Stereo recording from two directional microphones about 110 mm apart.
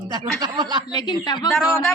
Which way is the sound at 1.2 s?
40° left (ahead or behind).